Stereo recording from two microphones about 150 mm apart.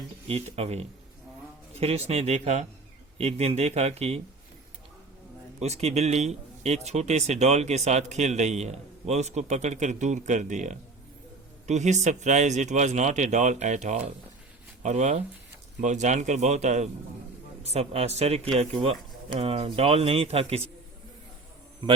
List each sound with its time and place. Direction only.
0.3 s speech: 40° right (ahead or behind)
5.5 s speech: 45° right (ahead or behind)